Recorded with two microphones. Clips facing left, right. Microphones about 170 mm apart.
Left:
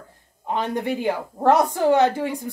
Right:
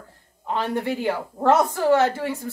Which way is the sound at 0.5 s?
20° left (ahead or behind).